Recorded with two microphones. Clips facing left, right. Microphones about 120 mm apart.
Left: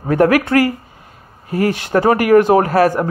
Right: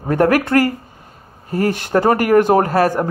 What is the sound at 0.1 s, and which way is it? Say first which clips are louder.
Speech: left 1 dB; 45° right (ahead or behind).